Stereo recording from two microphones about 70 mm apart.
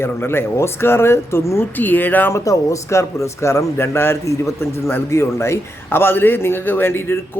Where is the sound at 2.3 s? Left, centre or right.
Left.